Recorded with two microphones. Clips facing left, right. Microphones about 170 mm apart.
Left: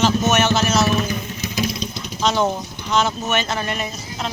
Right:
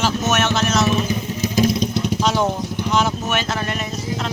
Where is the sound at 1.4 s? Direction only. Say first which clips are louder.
Right 8 dB; 45° right (ahead or behind); by 2.2 s 65° right (ahead or behind).